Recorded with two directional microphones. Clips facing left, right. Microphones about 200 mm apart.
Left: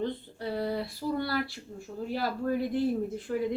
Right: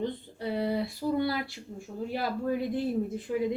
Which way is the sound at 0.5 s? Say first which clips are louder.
Right 2 dB; 20° right (ahead or behind).